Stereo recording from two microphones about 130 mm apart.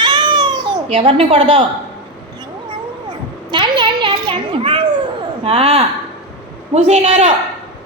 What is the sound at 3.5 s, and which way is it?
Children playing, 40° right (ahead or behind).